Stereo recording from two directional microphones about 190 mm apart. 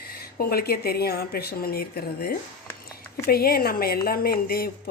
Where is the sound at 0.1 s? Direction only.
55° left (ahead or behind).